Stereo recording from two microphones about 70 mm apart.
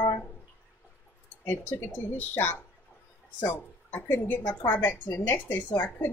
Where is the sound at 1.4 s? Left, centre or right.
Left.